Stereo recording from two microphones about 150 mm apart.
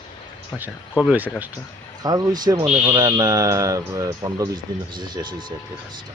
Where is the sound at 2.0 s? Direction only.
25° right (ahead or behind).